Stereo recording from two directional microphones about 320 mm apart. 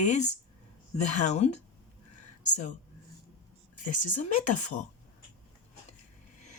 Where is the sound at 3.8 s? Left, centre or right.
Left.